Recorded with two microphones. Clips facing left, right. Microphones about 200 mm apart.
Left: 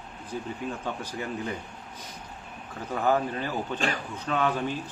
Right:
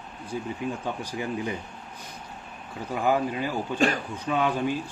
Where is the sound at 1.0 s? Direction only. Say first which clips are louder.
Right 3 dB; 15° right (ahead or behind).